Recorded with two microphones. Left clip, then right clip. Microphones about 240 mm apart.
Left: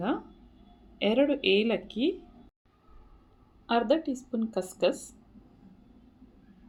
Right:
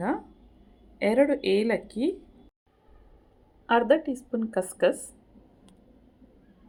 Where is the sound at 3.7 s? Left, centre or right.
Centre.